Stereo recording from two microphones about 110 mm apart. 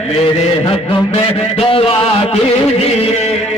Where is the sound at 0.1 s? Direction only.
65° left (ahead or behind).